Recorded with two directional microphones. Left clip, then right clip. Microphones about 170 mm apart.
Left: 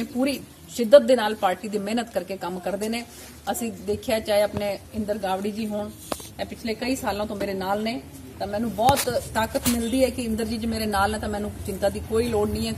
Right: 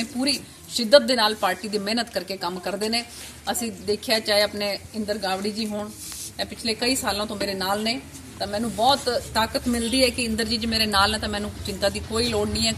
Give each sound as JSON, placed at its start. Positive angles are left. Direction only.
{"t": 0.2, "sound": "a woman's voice", "side_deg": 5}